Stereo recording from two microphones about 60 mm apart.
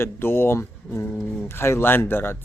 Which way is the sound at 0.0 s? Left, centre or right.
Left.